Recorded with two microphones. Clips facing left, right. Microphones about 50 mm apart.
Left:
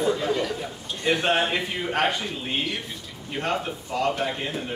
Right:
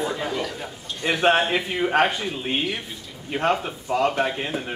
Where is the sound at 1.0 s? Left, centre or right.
Centre.